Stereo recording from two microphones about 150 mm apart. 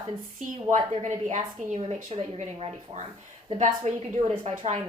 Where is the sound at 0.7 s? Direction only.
50° right (ahead or behind).